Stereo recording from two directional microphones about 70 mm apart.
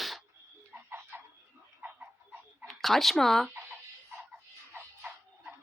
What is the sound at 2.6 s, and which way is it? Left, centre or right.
Speech, centre.